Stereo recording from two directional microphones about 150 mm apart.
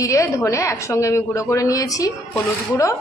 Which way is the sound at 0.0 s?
20° left (ahead or behind).